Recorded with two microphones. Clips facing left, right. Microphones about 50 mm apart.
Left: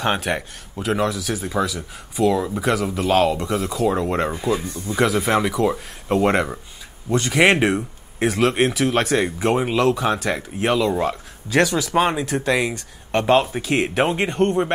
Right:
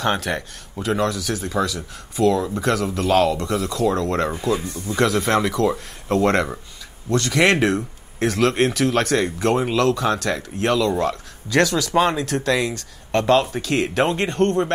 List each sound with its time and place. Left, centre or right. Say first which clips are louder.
0.0 s speech: even; centre